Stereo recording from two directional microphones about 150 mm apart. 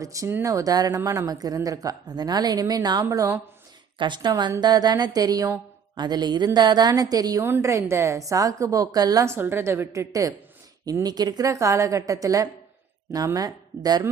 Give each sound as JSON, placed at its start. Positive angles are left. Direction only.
{"t": 0.0, "sound": "a woman's voice", "side_deg": -20}
{"t": 3.9, "sound": "a woman's voice", "side_deg": -30}